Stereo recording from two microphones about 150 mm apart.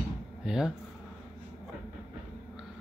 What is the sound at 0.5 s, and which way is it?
Speech, 5° right (ahead or behind).